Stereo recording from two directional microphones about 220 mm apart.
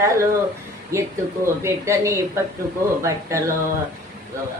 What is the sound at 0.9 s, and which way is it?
Speech, 10° right (ahead or behind).